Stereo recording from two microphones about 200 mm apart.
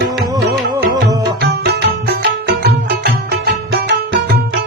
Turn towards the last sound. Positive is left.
turn(degrees=-55)  # may be behind; listen again after turning